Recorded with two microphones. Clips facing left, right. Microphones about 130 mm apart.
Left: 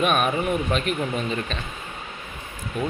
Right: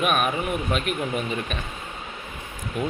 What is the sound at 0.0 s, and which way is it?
Speech, 5° right (ahead or behind).